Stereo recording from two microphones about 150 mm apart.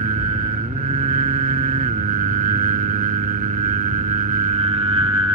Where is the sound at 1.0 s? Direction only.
65° right (ahead or behind).